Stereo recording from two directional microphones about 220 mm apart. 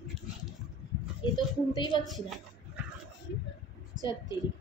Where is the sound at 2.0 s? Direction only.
Centre (ahead or behind).